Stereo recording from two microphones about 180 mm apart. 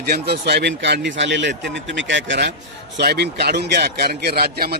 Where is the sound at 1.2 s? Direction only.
85° right.